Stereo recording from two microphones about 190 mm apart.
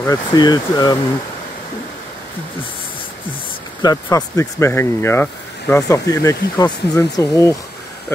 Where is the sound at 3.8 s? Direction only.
20° left (ahead or behind).